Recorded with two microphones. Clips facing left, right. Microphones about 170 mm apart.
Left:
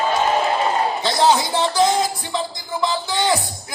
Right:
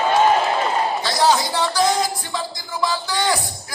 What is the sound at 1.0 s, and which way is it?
Speech, 20° left (ahead or behind).